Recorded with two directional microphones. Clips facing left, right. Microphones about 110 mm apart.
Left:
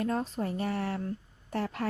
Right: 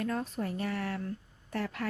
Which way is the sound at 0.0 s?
25° left (ahead or behind).